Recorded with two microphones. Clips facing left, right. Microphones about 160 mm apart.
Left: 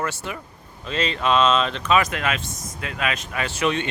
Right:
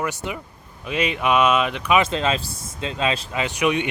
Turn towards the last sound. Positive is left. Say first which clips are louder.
# right 2 dB
turn(degrees=-15)  # may be behind; listen again after turning